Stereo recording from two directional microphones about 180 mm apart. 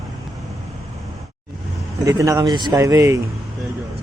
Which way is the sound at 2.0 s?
20° right (ahead or behind).